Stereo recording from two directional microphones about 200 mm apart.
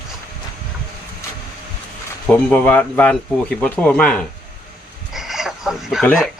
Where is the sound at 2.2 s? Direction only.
5° left (ahead or behind).